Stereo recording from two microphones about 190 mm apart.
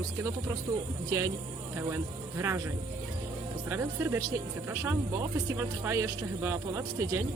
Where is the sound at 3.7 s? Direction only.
15° right (ahead or behind).